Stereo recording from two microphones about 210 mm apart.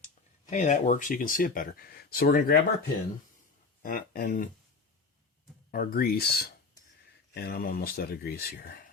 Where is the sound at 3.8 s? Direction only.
40° left (ahead or behind).